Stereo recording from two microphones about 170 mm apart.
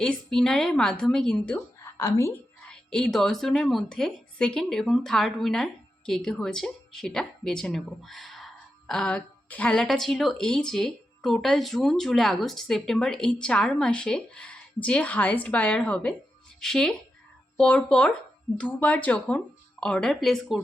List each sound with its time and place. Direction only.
0.0 s a woman's voice: 5° left (ahead or behind)
1.8 s a sound: 20° left (ahead or behind)
2.6 s a woman's voice: 5° left (ahead or behind)